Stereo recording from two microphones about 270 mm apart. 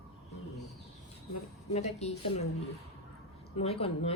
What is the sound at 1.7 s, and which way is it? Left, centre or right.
Speech, left.